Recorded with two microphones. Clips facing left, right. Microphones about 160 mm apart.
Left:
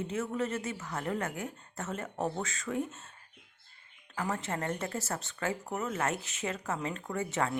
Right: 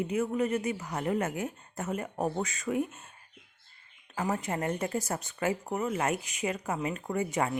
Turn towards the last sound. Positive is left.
turn(degrees=-15)  # may be behind; listen again after turning